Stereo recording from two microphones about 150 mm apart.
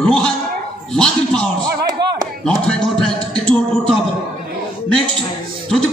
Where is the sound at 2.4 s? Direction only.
5° left (ahead or behind).